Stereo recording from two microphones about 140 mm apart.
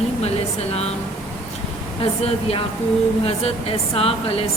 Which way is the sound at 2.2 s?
45° left (ahead or behind).